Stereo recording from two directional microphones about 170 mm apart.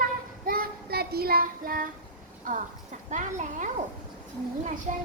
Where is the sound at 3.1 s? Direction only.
45° right (ahead or behind).